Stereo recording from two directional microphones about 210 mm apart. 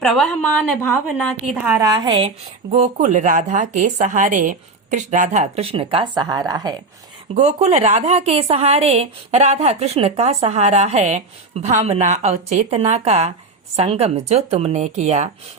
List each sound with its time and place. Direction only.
0.0 s a woman's voice: centre (ahead or behind)
1.9 s speech: 20° right (ahead or behind)
2.7 s speech: 35° right (ahead or behind)
7.3 s speech: 30° right (ahead or behind)